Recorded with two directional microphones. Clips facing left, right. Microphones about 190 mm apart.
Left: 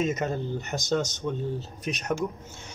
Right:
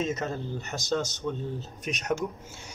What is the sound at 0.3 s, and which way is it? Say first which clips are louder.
A man's voice: left 4 dB; 15° left (ahead or behind).